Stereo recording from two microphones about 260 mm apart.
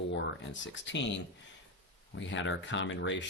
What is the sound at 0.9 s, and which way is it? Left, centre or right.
Speech, left.